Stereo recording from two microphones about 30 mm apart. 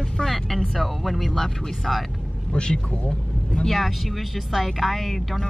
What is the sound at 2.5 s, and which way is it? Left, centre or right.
Speech, left.